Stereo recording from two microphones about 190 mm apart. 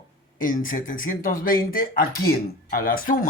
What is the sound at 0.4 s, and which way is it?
Speech, 45° left (ahead or behind).